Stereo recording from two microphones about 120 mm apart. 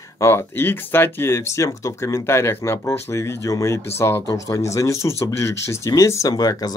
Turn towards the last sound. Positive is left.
turn(degrees=30)  # may be behind; listen again after turning